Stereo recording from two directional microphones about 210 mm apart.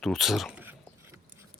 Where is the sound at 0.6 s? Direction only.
10° right (ahead or behind).